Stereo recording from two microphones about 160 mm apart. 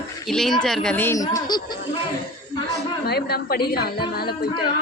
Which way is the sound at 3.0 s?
85° left.